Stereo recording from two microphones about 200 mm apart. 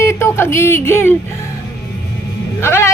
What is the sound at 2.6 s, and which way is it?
Speech, 10° left (ahead or behind).